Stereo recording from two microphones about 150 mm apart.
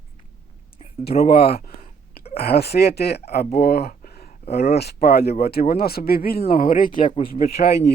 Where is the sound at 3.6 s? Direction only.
90° left; by 4.3 s 75° left (ahead or behind).